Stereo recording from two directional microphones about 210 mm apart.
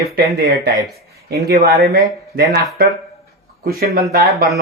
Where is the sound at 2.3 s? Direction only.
45° right (ahead or behind).